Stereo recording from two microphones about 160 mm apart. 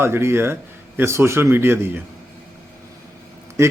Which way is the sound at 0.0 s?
15° right (ahead or behind).